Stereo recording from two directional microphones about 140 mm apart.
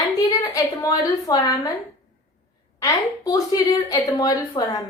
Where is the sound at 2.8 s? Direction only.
25° left (ahead or behind).